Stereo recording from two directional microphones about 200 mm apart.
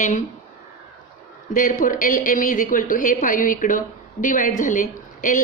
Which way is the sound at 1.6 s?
40° left (ahead or behind).